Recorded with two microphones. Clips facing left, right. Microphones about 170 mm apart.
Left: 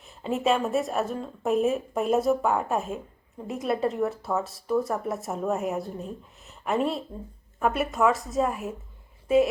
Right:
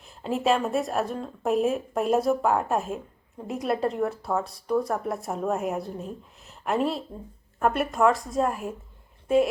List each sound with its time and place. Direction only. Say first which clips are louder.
0.2 s speech: even; centre (ahead or behind)